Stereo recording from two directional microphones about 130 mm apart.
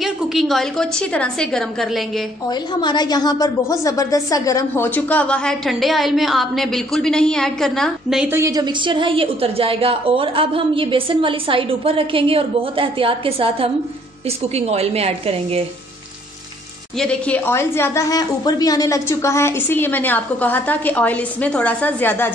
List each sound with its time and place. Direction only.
0.0 s a woman's voice: centre (ahead or behind)
2.7 s a woman's voice: 35° left (ahead or behind); by 8.3 s centre (ahead or behind)
8.3 s a woman's voice: 25° right (ahead or behind); by 15.6 s 50° right (ahead or behind)
17.0 s a woman's voice: 10° left (ahead or behind)